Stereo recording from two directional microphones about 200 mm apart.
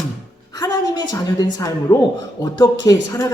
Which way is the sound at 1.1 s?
20° left (ahead or behind).